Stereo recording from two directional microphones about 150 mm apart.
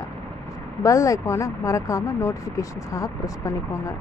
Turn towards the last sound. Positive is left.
turn(degrees=20)  # may be behind; listen again after turning